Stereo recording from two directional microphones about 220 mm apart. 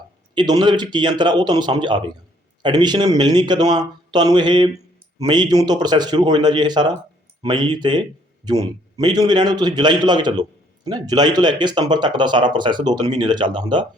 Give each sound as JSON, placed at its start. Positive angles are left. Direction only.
{"t": 0.3, "sound": "speech", "side_deg": -20}